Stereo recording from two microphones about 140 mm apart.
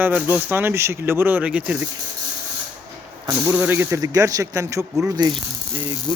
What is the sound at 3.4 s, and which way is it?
Speech, 15° right (ahead or behind).